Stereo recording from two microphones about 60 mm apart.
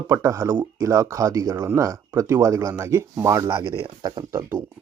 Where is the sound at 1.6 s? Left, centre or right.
Right.